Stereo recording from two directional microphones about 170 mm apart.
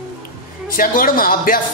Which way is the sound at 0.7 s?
55° left (ahead or behind).